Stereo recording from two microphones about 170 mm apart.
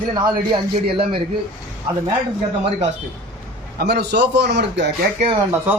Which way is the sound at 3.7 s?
75° right (ahead or behind).